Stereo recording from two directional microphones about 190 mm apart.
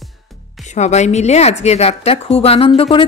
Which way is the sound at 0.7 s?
35° left (ahead or behind).